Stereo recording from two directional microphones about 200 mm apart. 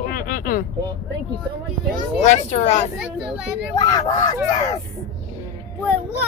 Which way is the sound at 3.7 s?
20° left (ahead or behind).